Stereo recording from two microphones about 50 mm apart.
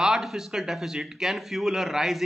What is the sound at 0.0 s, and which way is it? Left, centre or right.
A man's voice, centre.